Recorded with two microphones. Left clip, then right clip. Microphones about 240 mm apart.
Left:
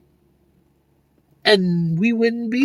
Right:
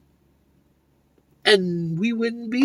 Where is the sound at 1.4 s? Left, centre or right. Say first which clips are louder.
Left 2 dB; left.